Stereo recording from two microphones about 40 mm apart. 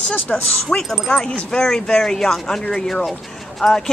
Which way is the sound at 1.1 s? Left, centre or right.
Left.